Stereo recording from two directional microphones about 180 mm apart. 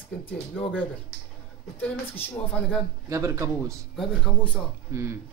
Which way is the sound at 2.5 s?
10° left (ahead or behind).